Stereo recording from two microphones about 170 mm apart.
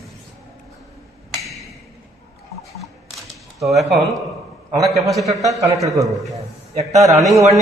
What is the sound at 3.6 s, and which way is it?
Speech, centre (ahead or behind).